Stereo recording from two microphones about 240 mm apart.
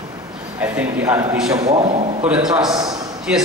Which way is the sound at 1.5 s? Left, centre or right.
Right.